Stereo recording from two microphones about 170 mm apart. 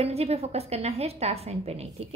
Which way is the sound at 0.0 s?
35° right (ahead or behind).